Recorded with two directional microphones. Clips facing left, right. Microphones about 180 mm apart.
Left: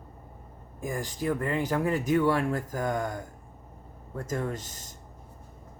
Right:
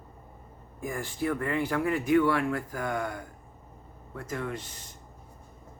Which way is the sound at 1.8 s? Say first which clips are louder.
Right 2 dB; 40° left (ahead or behind).